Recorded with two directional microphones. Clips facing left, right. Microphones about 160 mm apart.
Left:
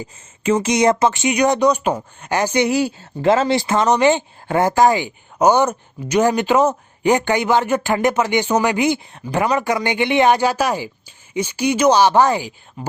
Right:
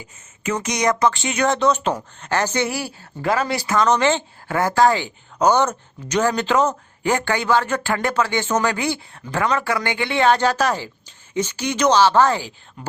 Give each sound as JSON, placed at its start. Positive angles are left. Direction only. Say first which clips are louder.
{"t": 0.4, "sound": "speech", "louder": "left 6 dB", "side_deg": 25}